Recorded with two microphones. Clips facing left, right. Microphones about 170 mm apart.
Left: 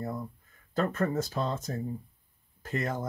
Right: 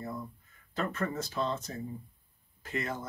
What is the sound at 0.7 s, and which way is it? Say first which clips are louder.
Speech: left 5 dB; 40° left (ahead or behind).